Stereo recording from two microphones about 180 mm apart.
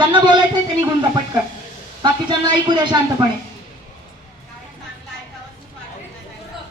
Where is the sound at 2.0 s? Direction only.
25° right (ahead or behind).